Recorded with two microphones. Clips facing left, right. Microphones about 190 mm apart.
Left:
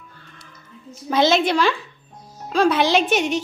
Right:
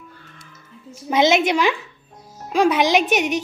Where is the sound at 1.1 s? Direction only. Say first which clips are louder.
Right 1 dB; 20° right (ahead or behind).